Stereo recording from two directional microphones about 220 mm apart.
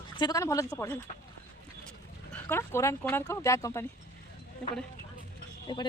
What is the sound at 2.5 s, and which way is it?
Speech, 10° left (ahead or behind).